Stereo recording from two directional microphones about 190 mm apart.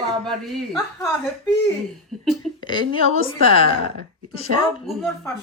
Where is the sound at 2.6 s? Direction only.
25° left (ahead or behind).